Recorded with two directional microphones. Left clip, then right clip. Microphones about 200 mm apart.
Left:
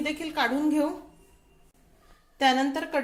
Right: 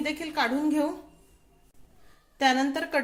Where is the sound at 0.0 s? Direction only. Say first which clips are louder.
Even; 5° right (ahead or behind).